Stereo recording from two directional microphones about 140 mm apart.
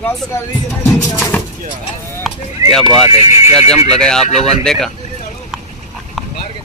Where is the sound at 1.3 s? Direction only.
10° left (ahead or behind).